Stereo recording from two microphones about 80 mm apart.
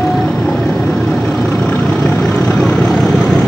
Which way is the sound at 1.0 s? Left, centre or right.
Centre.